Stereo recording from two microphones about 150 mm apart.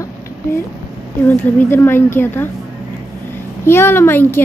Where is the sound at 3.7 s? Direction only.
15° left (ahead or behind).